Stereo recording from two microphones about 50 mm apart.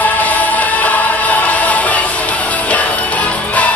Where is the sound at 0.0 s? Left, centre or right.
Left.